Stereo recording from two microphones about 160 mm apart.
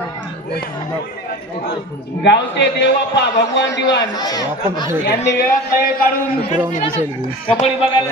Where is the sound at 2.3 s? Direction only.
90° left.